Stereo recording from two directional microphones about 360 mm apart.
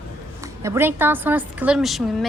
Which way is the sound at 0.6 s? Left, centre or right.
Centre.